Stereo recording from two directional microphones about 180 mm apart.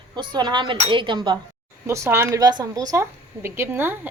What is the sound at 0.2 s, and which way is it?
A woman's voice, 25° right (ahead or behind).